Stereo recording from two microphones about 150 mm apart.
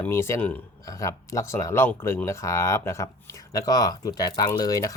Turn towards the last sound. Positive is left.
turn(degrees=25)  # may be behind; listen again after turning